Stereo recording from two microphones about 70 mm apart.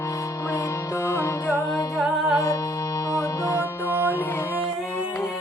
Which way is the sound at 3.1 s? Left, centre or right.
Left.